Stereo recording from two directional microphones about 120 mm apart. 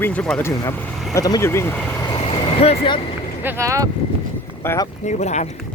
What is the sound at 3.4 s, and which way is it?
Speech, 20° right (ahead or behind).